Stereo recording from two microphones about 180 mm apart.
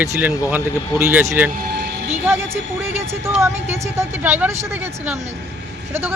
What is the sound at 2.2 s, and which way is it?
Speech, 10° right (ahead or behind).